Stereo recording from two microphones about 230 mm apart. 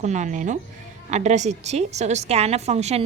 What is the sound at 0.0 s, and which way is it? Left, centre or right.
A woman's voice, right.